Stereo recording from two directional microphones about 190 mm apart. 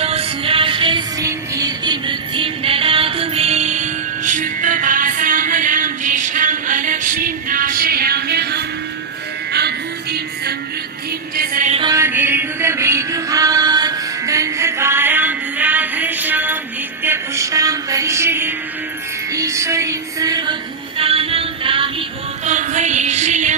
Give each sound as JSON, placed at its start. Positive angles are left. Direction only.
{"t": 0.0, "sound": "music", "side_deg": -30}
{"t": 11.3, "sound": "music", "side_deg": -45}
{"t": 11.7, "sound": "music", "side_deg": -25}
{"t": 11.9, "sound": "music", "side_deg": -10}
{"t": 22.4, "sound": "music", "side_deg": -40}